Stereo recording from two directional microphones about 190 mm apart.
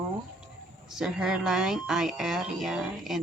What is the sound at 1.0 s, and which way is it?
Speech, 5° right (ahead or behind).